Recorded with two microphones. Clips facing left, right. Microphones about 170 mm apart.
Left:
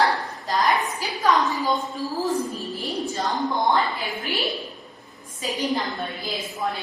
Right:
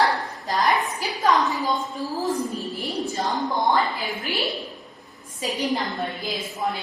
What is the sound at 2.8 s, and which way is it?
A woman's voice, centre (ahead or behind).